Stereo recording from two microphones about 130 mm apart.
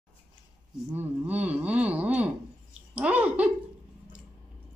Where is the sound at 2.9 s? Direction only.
10° right (ahead or behind).